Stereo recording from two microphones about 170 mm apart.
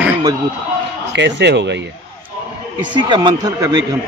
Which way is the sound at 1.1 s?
90° right.